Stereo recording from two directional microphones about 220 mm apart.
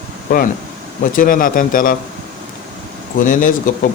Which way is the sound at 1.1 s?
40° left (ahead or behind).